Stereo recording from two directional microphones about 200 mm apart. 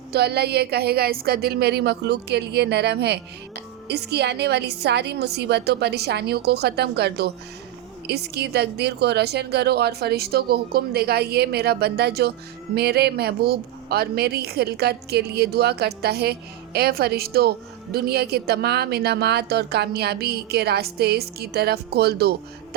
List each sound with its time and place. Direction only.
0.1 s a woman's voice: 55° right (ahead or behind)